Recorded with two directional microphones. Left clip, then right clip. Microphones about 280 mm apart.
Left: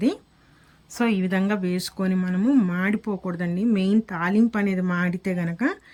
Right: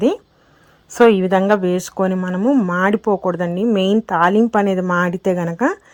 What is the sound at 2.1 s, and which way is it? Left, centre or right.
Speech, centre.